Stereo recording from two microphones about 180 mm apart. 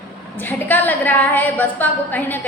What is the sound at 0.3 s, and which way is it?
A woman's voice, 10° left (ahead or behind).